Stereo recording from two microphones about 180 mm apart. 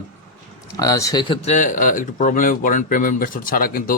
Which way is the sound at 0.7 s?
20° left (ahead or behind).